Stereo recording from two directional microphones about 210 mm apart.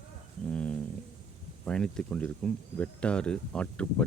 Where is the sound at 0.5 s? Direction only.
5° left (ahead or behind).